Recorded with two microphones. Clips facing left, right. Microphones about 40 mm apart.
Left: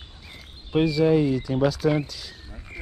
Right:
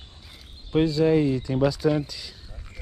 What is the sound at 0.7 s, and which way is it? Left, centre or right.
Speech, left.